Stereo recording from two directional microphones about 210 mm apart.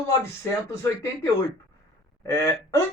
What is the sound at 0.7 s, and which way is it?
Speech, 10° left (ahead or behind).